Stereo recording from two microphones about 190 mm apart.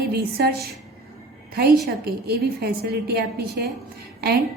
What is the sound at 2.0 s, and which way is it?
A woman's voice, 55° right (ahead or behind).